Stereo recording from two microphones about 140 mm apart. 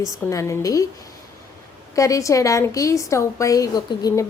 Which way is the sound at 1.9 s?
20° left (ahead or behind).